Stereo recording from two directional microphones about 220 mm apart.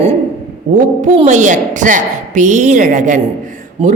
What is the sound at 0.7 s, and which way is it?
A woman's voice, 35° right (ahead or behind).